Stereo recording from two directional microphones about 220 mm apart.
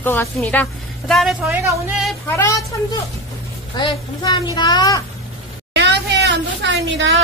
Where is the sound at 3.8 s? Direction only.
20° left (ahead or behind).